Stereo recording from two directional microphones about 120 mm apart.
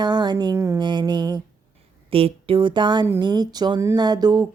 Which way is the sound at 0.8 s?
40° right (ahead or behind).